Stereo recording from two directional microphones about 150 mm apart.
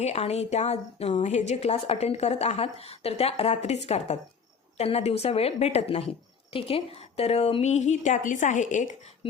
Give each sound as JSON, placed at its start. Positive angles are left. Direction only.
{"t": 0.0, "sound": "a woman's voice", "side_deg": 45}